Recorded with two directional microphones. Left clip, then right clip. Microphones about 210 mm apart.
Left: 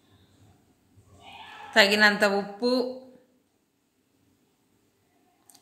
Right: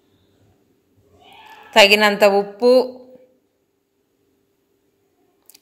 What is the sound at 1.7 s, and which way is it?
Speech, 35° right (ahead or behind).